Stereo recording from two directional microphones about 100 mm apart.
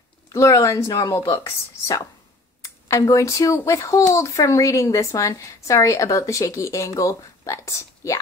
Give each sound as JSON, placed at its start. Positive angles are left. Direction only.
{"t": 0.3, "sound": "speech", "side_deg": 30}